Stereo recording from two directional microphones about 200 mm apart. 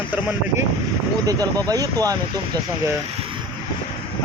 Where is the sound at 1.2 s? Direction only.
20° right (ahead or behind).